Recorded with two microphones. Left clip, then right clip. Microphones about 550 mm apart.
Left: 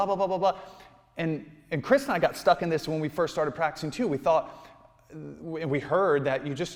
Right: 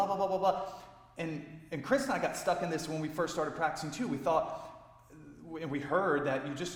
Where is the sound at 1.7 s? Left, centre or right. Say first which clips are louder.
Left 7 dB; left.